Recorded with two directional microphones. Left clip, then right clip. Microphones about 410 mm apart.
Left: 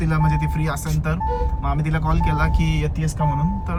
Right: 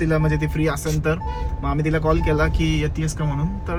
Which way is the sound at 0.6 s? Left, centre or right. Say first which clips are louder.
Right 4 dB; centre.